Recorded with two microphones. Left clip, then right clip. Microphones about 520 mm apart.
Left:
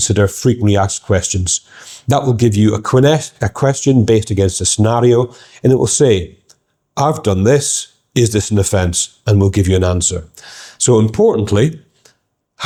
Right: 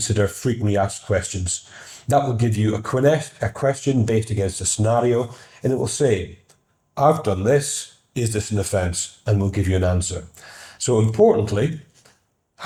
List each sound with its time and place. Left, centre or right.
0.0 s speech: left
8.1 s speech: left